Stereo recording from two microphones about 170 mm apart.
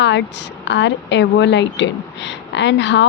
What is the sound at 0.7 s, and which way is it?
A woman's voice, 90° left.